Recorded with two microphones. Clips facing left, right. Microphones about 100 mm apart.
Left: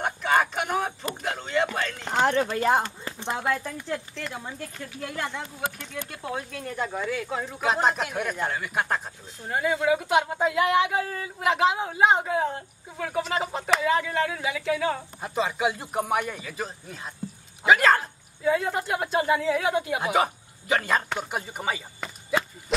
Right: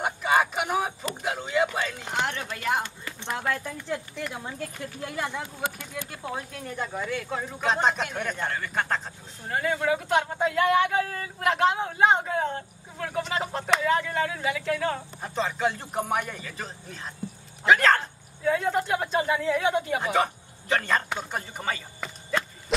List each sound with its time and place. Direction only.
0.0 s a sound: 5° right (ahead or behind)
2.1 s speech: 35° left (ahead or behind)
3.9 s speech: 10° right (ahead or behind); by 22.4 s 10° left (ahead or behind)